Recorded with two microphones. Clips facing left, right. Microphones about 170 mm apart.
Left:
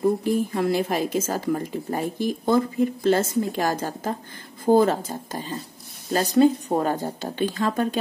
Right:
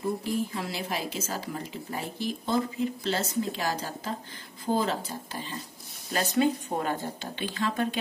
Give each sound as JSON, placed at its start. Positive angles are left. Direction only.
{"t": 0.2, "sound": "speech", "side_deg": 50}